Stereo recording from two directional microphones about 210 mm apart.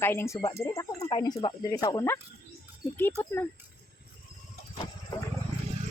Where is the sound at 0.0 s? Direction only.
10° left (ahead or behind).